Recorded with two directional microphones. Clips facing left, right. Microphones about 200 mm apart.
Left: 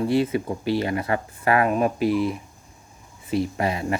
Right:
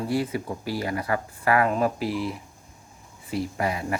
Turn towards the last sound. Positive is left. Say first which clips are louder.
# left 3 dB
turn(degrees=25)  # may be behind; listen again after turning